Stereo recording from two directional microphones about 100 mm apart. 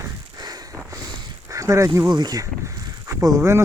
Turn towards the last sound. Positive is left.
turn(degrees=-30)  # may be behind; listen again after turning